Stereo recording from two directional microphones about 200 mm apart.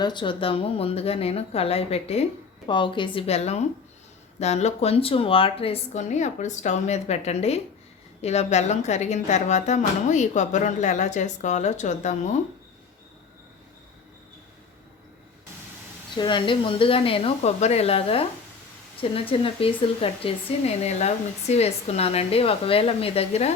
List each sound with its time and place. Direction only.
0.0 s a woman's voice: 20° left (ahead or behind)
16.1 s speech: 25° left (ahead or behind)